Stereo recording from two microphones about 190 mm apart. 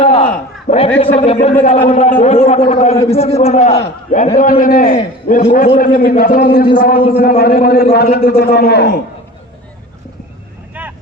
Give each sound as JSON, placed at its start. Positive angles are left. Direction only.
{"t": 0.0, "sound": "a sound", "side_deg": 30}
{"t": 0.3, "sound": "a man's voice", "side_deg": 35}
{"t": 10.8, "sound": "vehicle", "side_deg": -10}